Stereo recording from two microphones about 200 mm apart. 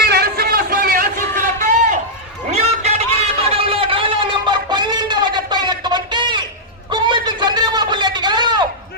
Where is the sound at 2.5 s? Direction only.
35° right (ahead or behind).